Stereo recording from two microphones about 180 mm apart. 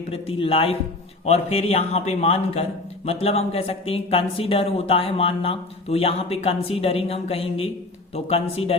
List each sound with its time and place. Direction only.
0.1 s speech: 30° left (ahead or behind)